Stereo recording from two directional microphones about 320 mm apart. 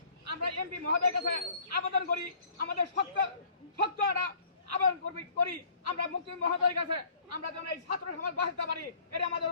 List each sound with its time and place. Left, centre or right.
0.3 s a man's voice: right